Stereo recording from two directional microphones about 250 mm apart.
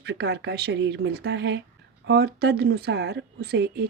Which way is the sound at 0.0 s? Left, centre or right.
Right.